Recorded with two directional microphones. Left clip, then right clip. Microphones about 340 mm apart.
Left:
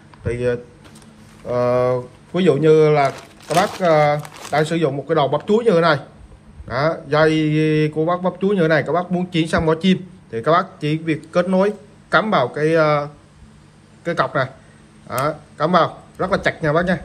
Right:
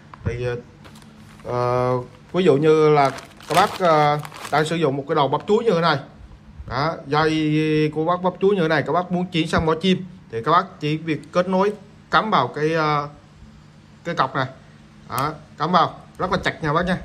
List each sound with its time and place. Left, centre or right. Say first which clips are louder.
1.5 s speech: left 4 dB; centre